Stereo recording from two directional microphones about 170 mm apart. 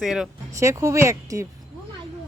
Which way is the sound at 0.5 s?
20° right (ahead or behind).